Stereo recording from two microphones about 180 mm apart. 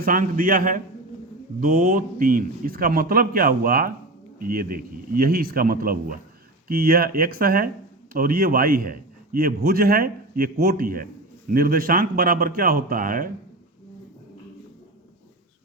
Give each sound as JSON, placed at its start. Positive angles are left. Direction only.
{"t": 0.0, "sound": "a man's voice", "side_deg": -50}